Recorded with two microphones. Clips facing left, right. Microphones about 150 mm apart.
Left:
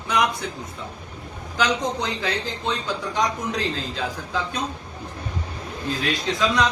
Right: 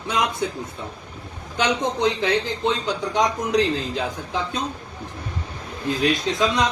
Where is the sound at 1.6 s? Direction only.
25° right (ahead or behind).